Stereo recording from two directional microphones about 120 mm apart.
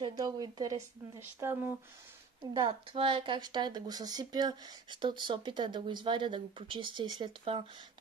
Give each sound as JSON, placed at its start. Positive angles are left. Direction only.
{"t": 0.0, "sound": "speech", "side_deg": -35}
{"t": 2.5, "sound": "speech", "side_deg": -45}